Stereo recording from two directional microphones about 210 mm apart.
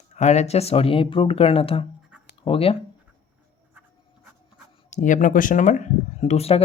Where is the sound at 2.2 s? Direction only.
25° left (ahead or behind).